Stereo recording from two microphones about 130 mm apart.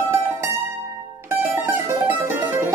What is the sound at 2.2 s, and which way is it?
Music, 20° right (ahead or behind).